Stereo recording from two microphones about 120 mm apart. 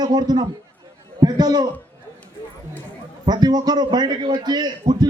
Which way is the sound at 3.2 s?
35° right (ahead or behind).